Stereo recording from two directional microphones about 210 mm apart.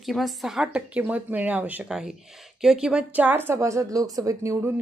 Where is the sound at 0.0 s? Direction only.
Centre (ahead or behind).